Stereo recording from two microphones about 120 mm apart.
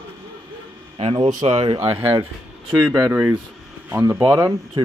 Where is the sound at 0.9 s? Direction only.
55° right (ahead or behind).